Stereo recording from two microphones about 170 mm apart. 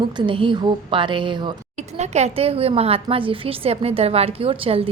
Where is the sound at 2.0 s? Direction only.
40° right (ahead or behind).